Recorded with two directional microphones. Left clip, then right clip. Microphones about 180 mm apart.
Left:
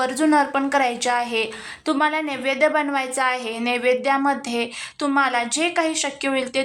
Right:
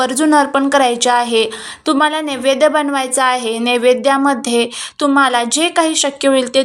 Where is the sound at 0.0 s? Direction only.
25° right (ahead or behind).